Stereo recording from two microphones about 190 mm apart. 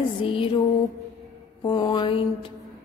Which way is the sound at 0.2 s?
25° left (ahead or behind).